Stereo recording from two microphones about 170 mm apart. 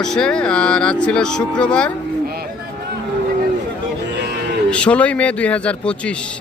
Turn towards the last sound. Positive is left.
turn(degrees=5)  # may be behind; listen again after turning